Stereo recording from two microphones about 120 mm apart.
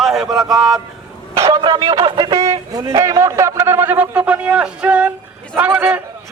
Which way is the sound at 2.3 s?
25° right (ahead or behind).